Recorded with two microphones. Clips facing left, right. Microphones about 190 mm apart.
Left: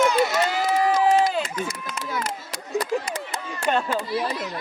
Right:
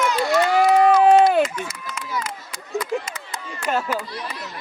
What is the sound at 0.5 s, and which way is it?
Run, 60° right (ahead or behind).